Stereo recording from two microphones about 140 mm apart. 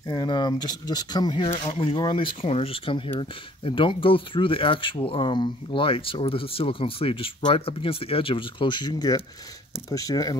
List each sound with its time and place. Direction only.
0.1 s speech: 30° left (ahead or behind)